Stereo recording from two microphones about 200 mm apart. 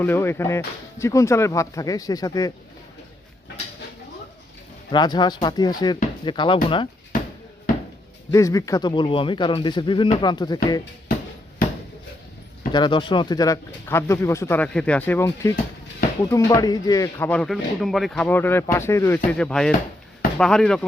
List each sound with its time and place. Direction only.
0.0 s speech: 10° left (ahead or behind)
4.9 s speech: 20° left (ahead or behind)
8.3 s speech: 15° left (ahead or behind)
12.7 s speech: 25° left (ahead or behind); by 20.8 s 5° left (ahead or behind)